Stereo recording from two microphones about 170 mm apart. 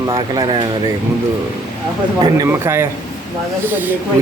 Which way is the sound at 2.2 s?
20° right (ahead or behind).